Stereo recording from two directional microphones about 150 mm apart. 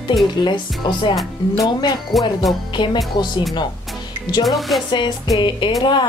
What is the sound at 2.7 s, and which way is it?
Speech, 30° left (ahead or behind).